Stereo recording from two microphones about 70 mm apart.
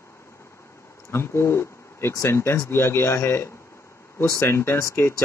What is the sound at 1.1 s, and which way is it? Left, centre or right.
Speech, left.